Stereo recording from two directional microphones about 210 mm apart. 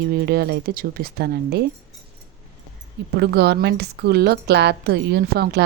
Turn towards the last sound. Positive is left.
turn(degrees=-50)  # may be behind; listen again after turning